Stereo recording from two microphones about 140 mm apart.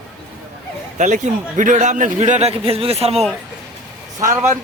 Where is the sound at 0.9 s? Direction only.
60° right (ahead or behind).